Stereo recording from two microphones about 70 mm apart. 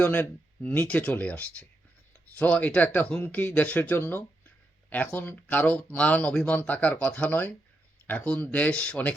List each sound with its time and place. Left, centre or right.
0.0 s speech: left